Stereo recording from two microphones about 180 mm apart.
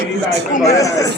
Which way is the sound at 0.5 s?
40° left (ahead or behind).